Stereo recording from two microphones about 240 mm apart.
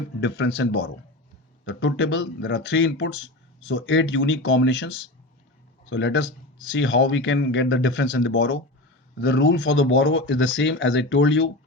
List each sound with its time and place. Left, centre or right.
0.2 s speech: left
5.9 s speech: left